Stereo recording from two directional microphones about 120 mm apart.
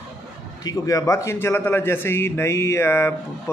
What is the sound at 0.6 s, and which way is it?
Speech, 30° left (ahead or behind).